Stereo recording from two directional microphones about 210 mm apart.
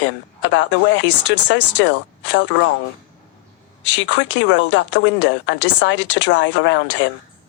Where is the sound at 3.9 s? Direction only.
60° left (ahead or behind).